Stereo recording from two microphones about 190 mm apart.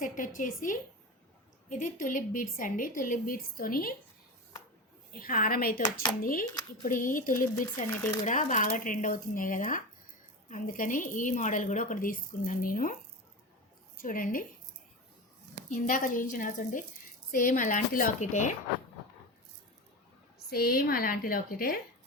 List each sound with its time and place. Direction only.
0.0 s a sound: 45° left (ahead or behind)
1.7 s a woman's voice: 45° left (ahead or behind)
5.2 s a woman's voice: 50° left (ahead or behind)
5.8 s speech: 25° left (ahead or behind)
6.8 s a woman's voice: 45° left (ahead or behind)
7.9 s speech: 15° left (ahead or behind)
8.2 s a woman's voice: 45° left (ahead or behind)
15.7 s a woman's voice: 45° left (ahead or behind)
20.5 s a woman's voice: 50° left (ahead or behind)